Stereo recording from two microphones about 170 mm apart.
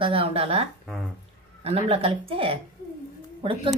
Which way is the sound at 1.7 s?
35° right (ahead or behind).